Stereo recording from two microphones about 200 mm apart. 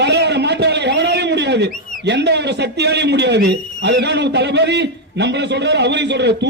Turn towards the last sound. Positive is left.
turn(degrees=-60)  # may be behind; listen again after turning